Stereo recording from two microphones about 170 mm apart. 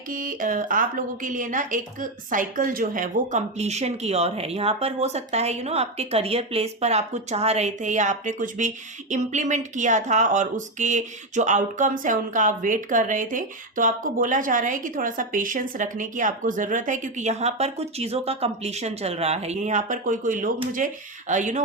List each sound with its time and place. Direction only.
0.1 s a woman's voice: 55° right (ahead or behind)